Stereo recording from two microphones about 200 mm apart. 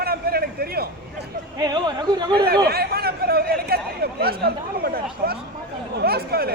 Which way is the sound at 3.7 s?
50° right (ahead or behind).